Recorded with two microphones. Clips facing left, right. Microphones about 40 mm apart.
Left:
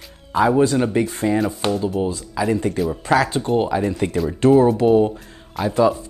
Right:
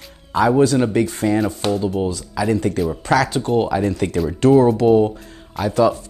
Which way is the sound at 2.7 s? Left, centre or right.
Centre.